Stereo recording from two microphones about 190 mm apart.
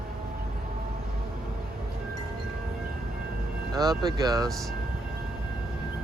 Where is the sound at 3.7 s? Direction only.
20° right (ahead or behind).